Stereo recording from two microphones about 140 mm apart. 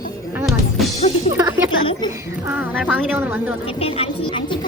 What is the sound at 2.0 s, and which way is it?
Speech, 30° left (ahead or behind).